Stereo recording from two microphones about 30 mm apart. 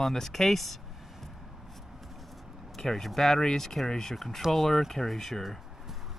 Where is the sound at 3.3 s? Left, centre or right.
Centre.